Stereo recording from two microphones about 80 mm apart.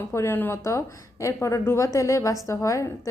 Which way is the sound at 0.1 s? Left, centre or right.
Left.